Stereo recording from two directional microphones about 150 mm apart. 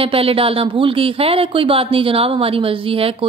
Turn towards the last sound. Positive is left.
turn(degrees=-40)  # may be behind; listen again after turning